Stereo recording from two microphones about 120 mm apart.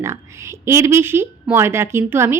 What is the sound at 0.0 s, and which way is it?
A woman's voice, 20° right (ahead or behind).